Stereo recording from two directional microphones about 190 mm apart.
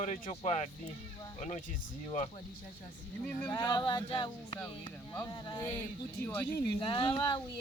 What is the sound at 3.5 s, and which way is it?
Speech, 25° left (ahead or behind).